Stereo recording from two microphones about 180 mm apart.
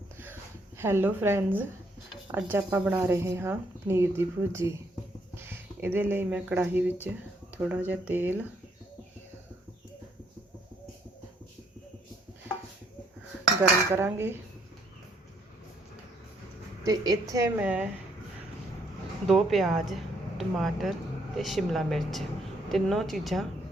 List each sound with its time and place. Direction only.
0.8 s speech: 15° right (ahead or behind)
13.6 s speech: 15° right (ahead or behind)
16.8 s speech: 20° right (ahead or behind)
19.3 s speech: centre (ahead or behind)